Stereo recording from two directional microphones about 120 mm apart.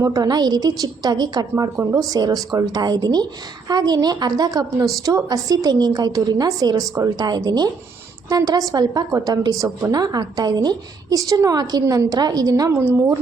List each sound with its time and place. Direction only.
0.0 s a woman's voice: 30° right (ahead or behind)
1.7 s speech: 20° right (ahead or behind)
2.0 s a woman's voice: 30° right (ahead or behind)